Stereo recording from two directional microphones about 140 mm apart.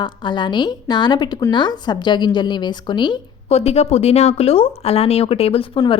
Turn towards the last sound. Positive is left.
turn(degrees=45)  # may be behind; listen again after turning